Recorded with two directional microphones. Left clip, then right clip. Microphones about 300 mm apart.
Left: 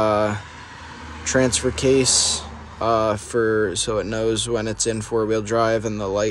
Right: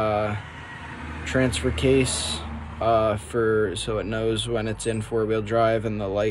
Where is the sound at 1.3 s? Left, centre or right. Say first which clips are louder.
Left 4 dB; centre.